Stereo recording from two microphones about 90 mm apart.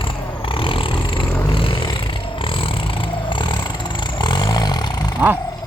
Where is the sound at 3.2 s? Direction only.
60° left (ahead or behind).